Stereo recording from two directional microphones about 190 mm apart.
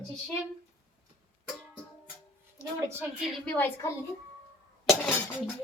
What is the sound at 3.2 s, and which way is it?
Speech, 10° left (ahead or behind).